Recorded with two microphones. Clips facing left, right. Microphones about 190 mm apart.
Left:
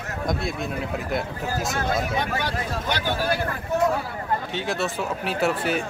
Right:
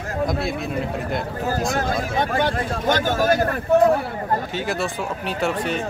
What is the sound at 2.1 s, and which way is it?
Speech, 50° right (ahead or behind).